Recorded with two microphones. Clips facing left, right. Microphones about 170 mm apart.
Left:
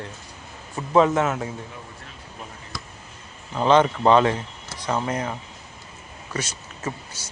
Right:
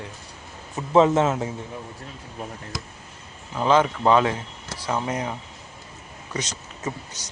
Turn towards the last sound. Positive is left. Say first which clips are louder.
# even
turn(degrees=-15)  # may be behind; listen again after turning